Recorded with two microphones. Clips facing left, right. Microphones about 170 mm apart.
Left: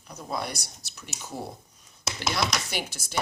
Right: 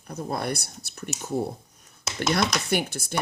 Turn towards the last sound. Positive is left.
turn(degrees=-55)  # may be behind; listen again after turning